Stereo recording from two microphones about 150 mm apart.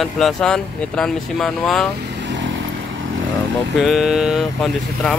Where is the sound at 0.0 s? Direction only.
5° left (ahead or behind).